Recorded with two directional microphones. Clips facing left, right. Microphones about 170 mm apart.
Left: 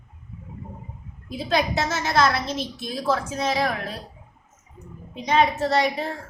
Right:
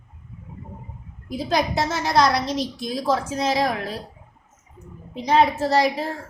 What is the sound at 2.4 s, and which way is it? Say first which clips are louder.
Speech: right 4 dB; centre (ahead or behind).